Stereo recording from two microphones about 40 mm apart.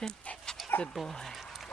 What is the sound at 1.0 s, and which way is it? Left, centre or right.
Speech, centre.